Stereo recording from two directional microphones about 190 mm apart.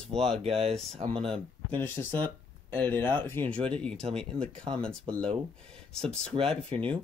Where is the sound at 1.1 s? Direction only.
25° right (ahead or behind).